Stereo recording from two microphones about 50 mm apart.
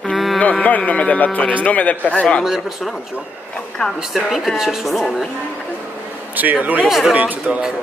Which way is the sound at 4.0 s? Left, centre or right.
Centre.